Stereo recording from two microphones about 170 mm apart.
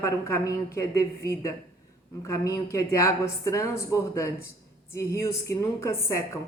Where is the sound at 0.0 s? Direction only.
15° left (ahead or behind).